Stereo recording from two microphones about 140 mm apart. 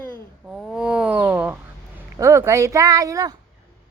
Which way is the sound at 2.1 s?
20° right (ahead or behind).